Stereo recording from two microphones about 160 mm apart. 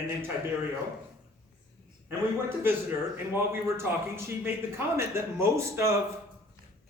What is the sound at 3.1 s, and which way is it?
Speech, 15° right (ahead or behind).